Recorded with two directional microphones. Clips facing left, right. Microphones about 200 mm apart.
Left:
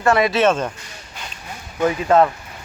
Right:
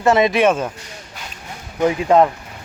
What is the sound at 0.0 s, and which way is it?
Speech, 20° right (ahead or behind).